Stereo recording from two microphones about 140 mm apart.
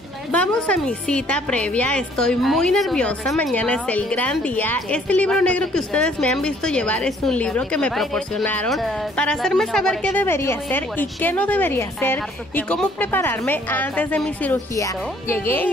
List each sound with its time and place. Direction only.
0.3 s a woman's voice: 10° left (ahead or behind)
10.2 s a woman's voice: 15° left (ahead or behind)